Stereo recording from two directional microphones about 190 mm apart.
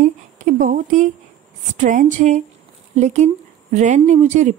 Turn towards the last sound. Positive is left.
turn(degrees=-40)  # may be behind; listen again after turning